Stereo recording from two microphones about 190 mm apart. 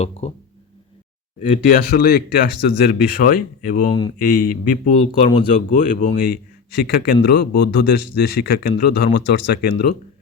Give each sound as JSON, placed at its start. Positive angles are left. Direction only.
{"t": 0.0, "sound": "speech", "side_deg": 35}
{"t": 1.4, "sound": "speech", "side_deg": 45}
{"t": 3.8, "sound": "speech", "side_deg": 25}
{"t": 4.2, "sound": "speech", "side_deg": 50}
{"t": 5.5, "sound": "speech", "side_deg": 45}
{"t": 6.1, "sound": "a man's voice", "side_deg": 55}